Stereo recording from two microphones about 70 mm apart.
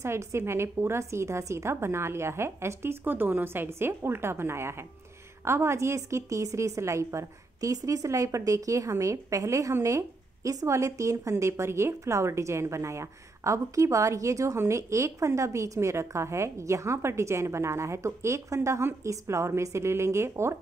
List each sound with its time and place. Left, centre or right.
0.0 s a woman's voice: right